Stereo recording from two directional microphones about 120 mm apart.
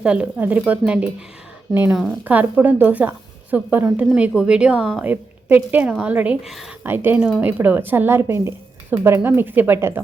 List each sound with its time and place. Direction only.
0.0 s a woman's voice: 10° right (ahead or behind)
5.0 s a woman's voice: 15° right (ahead or behind)
6.5 s speech: centre (ahead or behind)
6.8 s a woman's voice: 20° right (ahead or behind)
7.2 s speech: centre (ahead or behind)
7.4 s a woman's voice: 15° right (ahead or behind)